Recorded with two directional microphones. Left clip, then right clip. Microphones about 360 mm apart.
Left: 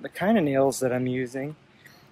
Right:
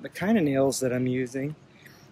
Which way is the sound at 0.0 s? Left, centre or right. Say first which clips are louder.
Left 2 dB; centre.